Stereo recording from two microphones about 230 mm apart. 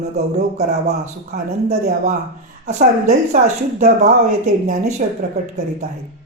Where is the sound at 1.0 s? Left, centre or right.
Right.